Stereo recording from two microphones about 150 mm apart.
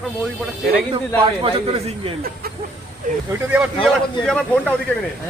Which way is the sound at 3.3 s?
10° right (ahead or behind).